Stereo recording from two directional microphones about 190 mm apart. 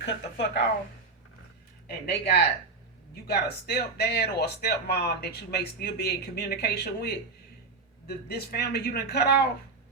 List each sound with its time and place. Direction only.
0.0 s speech: 65° left (ahead or behind)
2.0 s speech: 60° left (ahead or behind)